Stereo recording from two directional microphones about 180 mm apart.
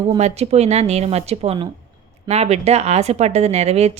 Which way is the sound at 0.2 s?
35° right (ahead or behind).